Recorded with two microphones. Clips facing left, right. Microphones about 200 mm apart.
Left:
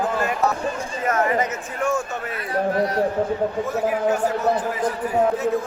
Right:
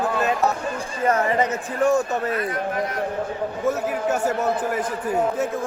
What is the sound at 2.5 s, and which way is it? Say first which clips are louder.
Speech: left 4 dB; 35° left (ahead or behind).